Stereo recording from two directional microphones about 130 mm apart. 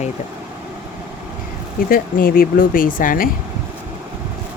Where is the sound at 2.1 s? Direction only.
90° left.